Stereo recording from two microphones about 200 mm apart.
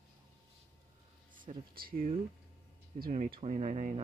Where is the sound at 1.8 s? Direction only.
45° right (ahead or behind).